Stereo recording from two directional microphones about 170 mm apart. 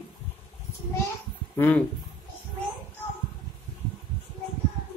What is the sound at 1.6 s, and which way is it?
Speech, 10° left (ahead or behind).